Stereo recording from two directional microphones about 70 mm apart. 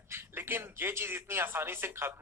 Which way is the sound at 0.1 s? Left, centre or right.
Right.